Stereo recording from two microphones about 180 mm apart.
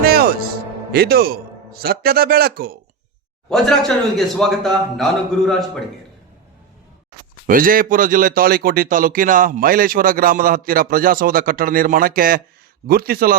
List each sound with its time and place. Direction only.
0.0 s music: 60° right (ahead or behind)
0.9 s a man's voice: 55° right (ahead or behind)
3.5 s a man's voice: centre (ahead or behind)
7.4 s a man's voice: 50° right (ahead or behind)